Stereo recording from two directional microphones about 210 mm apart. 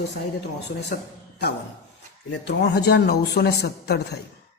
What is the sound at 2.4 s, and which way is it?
A woman's voice, 50° left (ahead or behind).